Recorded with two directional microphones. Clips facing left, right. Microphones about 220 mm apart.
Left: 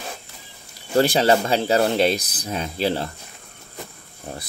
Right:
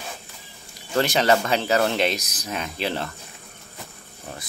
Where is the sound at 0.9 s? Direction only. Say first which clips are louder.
Left 3 dB; 30° left (ahead or behind).